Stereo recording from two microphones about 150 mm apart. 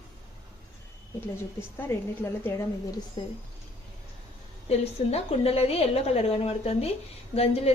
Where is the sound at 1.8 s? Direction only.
15° left (ahead or behind).